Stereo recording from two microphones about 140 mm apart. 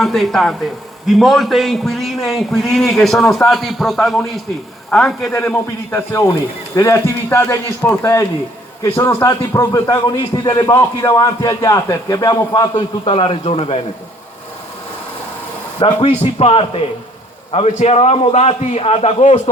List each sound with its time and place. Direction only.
0.0 s a man's voice: centre (ahead or behind)
5.3 s a man's voice: 20° left (ahead or behind); by 13.7 s 45° left (ahead or behind)
15.8 s a man's voice: 40° left (ahead or behind)